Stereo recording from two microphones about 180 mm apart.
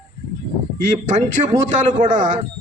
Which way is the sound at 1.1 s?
40° right (ahead or behind).